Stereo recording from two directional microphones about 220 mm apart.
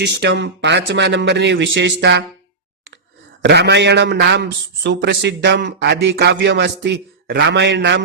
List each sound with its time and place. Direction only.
0.0 s a man's voice: 50° right (ahead or behind)
3.4 s a man's voice: 50° right (ahead or behind)